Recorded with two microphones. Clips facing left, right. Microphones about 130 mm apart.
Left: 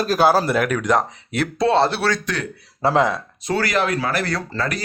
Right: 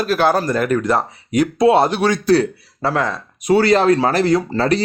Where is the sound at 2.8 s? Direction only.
20° left (ahead or behind).